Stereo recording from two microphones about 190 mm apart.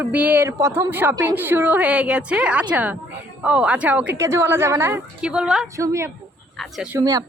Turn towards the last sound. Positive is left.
turn(degrees=-20)  # may be behind; listen again after turning